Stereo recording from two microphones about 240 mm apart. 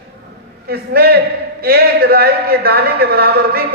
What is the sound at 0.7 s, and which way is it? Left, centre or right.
A woman's voice, right.